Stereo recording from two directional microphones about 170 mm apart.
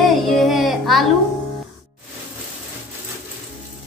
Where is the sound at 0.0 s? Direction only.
Centre (ahead or behind).